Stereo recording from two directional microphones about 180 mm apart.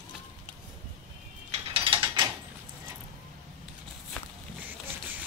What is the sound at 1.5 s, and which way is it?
Mechanisms, 30° right (ahead or behind).